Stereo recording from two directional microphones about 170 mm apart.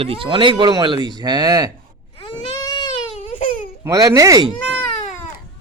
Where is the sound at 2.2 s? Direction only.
25° left (ahead or behind).